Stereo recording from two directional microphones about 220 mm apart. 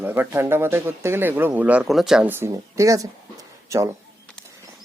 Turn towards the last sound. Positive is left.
turn(degrees=-15)  # may be behind; listen again after turning